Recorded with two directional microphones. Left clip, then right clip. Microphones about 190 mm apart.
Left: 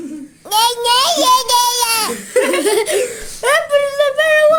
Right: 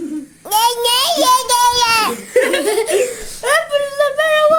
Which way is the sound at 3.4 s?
25° left (ahead or behind).